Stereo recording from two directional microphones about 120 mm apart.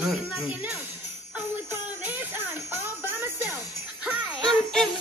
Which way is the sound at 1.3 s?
15° right (ahead or behind).